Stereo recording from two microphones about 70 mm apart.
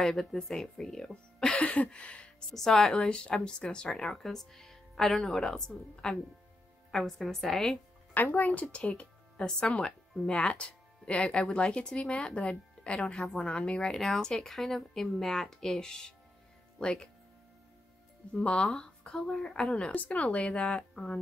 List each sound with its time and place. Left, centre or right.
0.0 s speech: centre
1.6 s a sound: centre
2.5 s a woman's voice: centre
8.1 s speech: left; by 17.1 s centre
18.3 s speech: centre